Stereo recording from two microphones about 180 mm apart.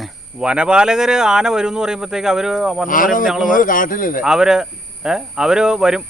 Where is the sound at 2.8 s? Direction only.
50° left (ahead or behind).